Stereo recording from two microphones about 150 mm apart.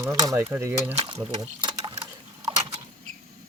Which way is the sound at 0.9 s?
45° right (ahead or behind).